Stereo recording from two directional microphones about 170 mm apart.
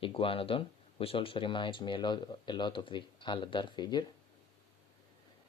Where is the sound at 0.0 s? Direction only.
30° left (ahead or behind).